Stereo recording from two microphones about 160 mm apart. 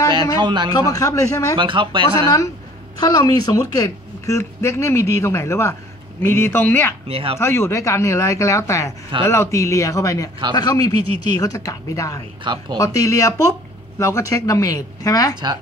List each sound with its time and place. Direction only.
0.4 s a man's voice: 30° right (ahead or behind)
0.7 s speech: 20° left (ahead or behind)
1.6 s speech: 30° right (ahead or behind)
2.2 s a man's voice: 20° left (ahead or behind)
7.1 s speech: 35° right (ahead or behind)
7.3 s speech: 15° left (ahead or behind)